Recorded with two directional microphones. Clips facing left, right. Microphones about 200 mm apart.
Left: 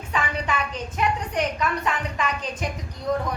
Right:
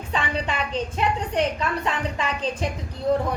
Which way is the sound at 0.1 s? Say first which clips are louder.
Even; 30° right (ahead or behind).